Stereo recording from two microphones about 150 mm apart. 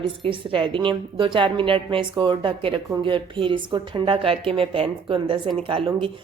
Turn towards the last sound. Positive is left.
turn(degrees=-35)  # may be behind; listen again after turning